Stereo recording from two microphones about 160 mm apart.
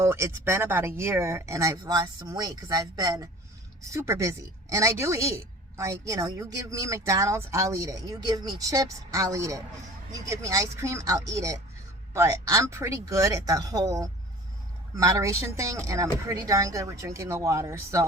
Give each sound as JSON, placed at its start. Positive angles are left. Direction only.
{"t": 0.0, "sound": "a woman's voice", "side_deg": -15}